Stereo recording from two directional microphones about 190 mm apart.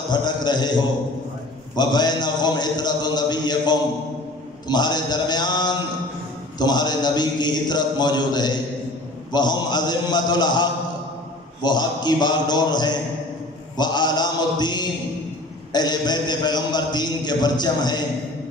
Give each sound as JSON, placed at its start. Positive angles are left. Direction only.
{"t": 0.1, "sound": "a man's voice", "side_deg": 25}
{"t": 1.8, "sound": "a man's voice", "side_deg": 20}